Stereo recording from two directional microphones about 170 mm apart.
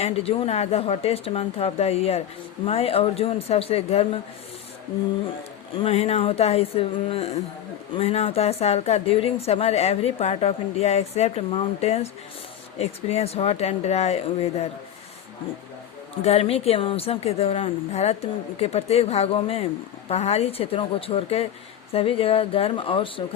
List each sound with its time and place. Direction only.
0.0 s a woman's voice: 35° left (ahead or behind)
5.7 s a woman's voice: 35° left (ahead or behind)
16.2 s a woman's voice: 35° left (ahead or behind)